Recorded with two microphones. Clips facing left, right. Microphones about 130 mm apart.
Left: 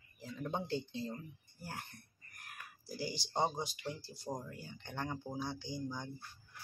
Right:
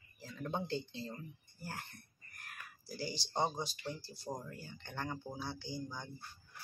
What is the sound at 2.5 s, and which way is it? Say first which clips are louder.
Speech: left 1 dB; 15° left (ahead or behind).